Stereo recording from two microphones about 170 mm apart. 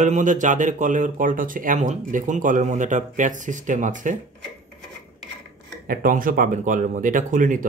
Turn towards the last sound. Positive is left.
turn(degrees=-50)  # may be behind; listen again after turning